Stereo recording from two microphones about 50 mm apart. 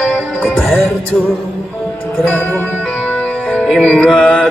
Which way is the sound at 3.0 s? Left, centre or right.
Left.